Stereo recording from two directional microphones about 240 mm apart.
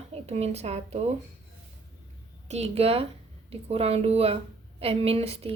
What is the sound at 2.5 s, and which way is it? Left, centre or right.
A woman's voice, right.